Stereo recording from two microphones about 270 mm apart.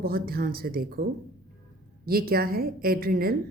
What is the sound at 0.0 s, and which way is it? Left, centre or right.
A woman's voice, right.